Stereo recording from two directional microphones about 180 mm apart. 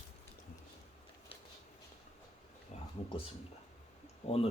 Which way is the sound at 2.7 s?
40° left (ahead or behind).